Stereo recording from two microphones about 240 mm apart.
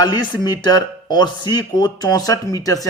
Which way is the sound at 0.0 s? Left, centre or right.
Centre.